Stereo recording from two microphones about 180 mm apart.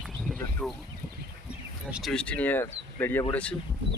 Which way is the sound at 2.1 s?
5° left (ahead or behind).